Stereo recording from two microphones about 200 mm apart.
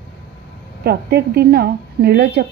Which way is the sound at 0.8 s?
55° right (ahead or behind).